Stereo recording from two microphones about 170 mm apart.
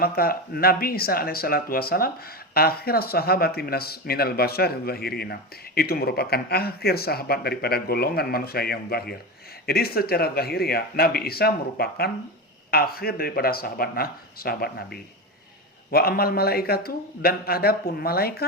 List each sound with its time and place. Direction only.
0.0 s speech: 65° left (ahead or behind)